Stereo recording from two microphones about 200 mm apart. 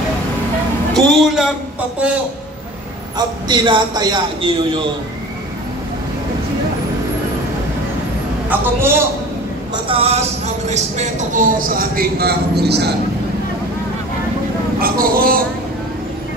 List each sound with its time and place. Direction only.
0.9 s a man's voice: centre (ahead or behind)
3.2 s a man's voice: 25° right (ahead or behind)
8.5 s a man's voice: 10° right (ahead or behind)
9.8 s speech: 30° right (ahead or behind); by 12.9 s 55° right (ahead or behind)
14.8 s speech: 45° right (ahead or behind)